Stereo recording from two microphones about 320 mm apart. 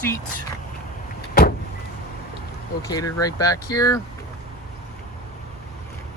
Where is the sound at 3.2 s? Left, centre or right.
Centre.